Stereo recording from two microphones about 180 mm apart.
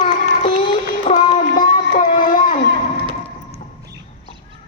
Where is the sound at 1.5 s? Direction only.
50° left (ahead or behind).